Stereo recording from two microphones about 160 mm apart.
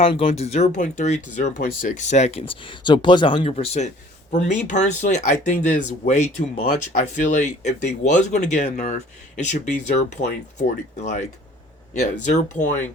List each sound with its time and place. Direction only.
0.0 s speech: 35° left (ahead or behind)
12.2 s speech: 50° left (ahead or behind)